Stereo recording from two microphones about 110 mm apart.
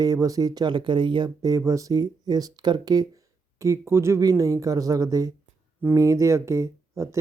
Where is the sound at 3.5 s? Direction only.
30° right (ahead or behind).